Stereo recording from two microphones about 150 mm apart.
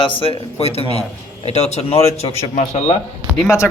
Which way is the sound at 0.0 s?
40° left (ahead or behind).